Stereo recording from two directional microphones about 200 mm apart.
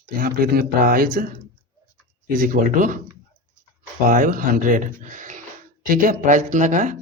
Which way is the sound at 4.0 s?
45° right (ahead or behind).